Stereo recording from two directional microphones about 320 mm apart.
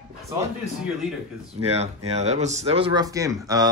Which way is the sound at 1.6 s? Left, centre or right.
Centre.